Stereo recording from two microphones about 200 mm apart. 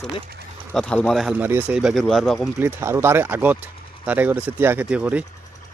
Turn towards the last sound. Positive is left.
turn(degrees=-5)  # may be behind; listen again after turning